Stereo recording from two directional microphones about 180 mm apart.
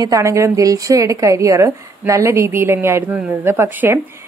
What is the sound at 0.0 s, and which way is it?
A woman's voice, 15° right (ahead or behind).